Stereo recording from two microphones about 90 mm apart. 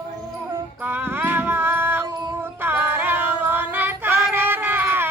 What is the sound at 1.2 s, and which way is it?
Music, 25° right (ahead or behind).